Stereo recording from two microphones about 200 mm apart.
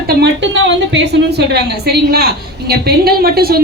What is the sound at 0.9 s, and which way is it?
Speech, 55° right (ahead or behind).